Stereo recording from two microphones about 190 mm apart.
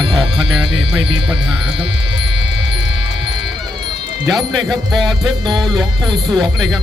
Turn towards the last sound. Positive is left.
turn(degrees=0)  # may be behind; listen again after turning